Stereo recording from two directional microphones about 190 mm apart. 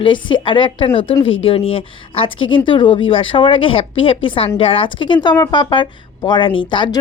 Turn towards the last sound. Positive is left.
turn(degrees=25)  # may be behind; listen again after turning